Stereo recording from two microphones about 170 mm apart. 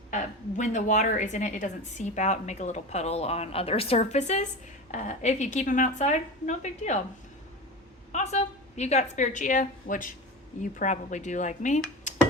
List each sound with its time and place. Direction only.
0.1 s a woman's voice: 45° left (ahead or behind)
8.1 s a woman's voice: 40° left (ahead or behind)